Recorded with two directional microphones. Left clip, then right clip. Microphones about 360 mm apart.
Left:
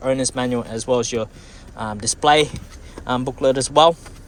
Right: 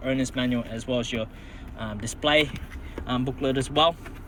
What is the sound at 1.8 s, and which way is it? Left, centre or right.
Speech, left.